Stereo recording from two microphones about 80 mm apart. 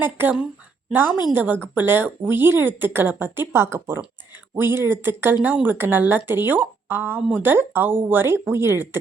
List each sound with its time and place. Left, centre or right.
0.0 s speech: right
5.4 s speech: centre